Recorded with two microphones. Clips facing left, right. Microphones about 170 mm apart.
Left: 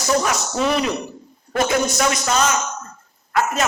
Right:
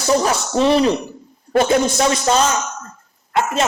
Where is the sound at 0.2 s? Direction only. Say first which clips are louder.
Right 4 dB; 30° right (ahead or behind).